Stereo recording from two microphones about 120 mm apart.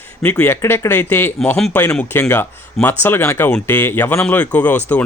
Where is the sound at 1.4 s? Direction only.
5° left (ahead or behind).